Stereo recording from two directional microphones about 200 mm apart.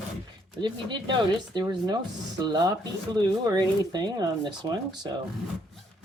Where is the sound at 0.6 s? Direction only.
20° right (ahead or behind).